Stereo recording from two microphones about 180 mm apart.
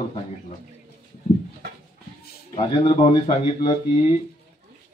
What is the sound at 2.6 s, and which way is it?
Speech, 30° left (ahead or behind).